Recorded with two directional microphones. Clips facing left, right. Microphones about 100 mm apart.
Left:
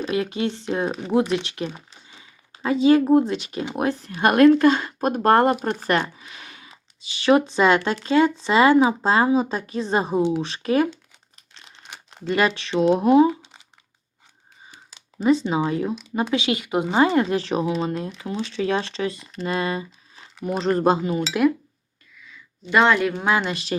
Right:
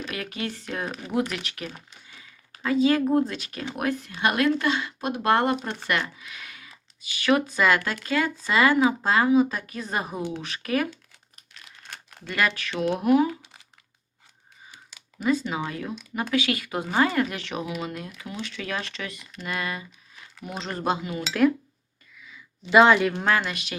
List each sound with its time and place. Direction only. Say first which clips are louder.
0.0 s speech: left 8 dB; 25° left (ahead or behind)
4.1 s speech: left 10 dB; 45° left (ahead or behind)
6.0 s speech: left 4 dB; 30° left (ahead or behind)
11.3 s crumpling: left 1 dB; 25° left (ahead or behind)
11.9 s speech: left 11 dB; 20° left (ahead or behind)
14.7 s speech: left 1 dB; 30° left (ahead or behind)
22.3 s speech: right 2 dB; 5° right (ahead or behind)
23.4 s speech: left 4 dB; 30° left (ahead or behind)